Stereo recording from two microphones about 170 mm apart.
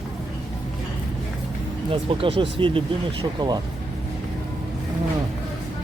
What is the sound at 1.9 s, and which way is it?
Speech, 30° right (ahead or behind).